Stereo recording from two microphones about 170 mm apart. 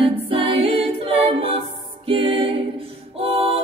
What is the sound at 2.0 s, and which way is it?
Music, 30° right (ahead or behind).